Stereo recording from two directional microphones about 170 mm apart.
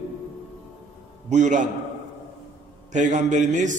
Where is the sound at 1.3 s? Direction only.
45° right (ahead or behind).